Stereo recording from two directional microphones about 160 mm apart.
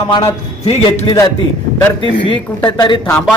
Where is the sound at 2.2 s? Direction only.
30° left (ahead or behind).